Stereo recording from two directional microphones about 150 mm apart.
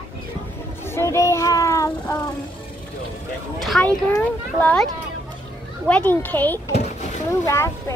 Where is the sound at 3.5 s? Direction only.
Centre (ahead or behind).